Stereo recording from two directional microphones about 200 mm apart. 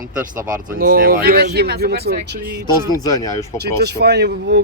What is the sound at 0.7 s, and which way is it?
Speech, 45° right (ahead or behind).